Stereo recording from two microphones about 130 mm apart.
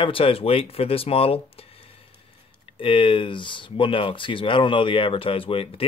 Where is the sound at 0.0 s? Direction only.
45° left (ahead or behind).